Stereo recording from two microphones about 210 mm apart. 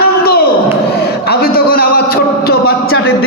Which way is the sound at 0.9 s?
50° left (ahead or behind).